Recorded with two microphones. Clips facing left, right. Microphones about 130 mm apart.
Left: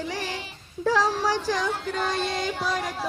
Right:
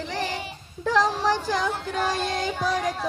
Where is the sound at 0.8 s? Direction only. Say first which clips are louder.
Right 1 dB; 5° left (ahead or behind).